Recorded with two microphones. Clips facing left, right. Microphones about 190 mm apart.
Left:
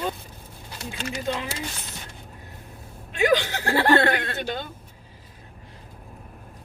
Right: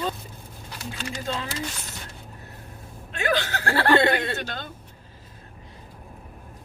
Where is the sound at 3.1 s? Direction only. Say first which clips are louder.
Left 4 dB; 15° left (ahead or behind).